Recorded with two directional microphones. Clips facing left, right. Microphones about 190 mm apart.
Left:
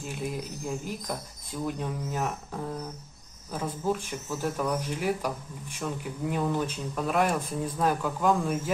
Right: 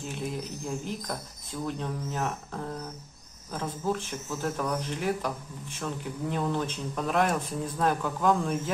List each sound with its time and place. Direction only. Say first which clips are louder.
0.2 s speech: left 1 dB; 5° left (ahead or behind)